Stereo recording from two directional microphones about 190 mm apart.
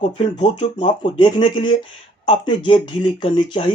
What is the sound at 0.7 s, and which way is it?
Speech, 25° left (ahead or behind).